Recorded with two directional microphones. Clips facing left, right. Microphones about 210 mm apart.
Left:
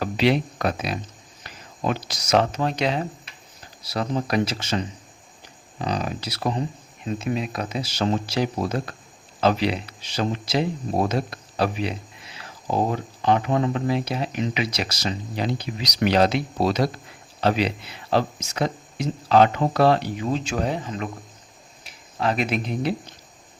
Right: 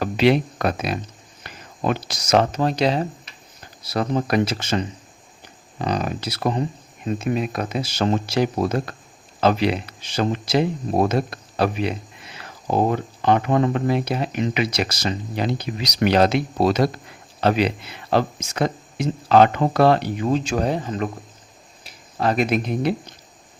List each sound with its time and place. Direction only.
0.0 s speech: 55° right (ahead or behind); by 3.0 s 35° right (ahead or behind)
3.8 s speech: 55° right (ahead or behind)
5.8 s speech: 55° right (ahead or behind)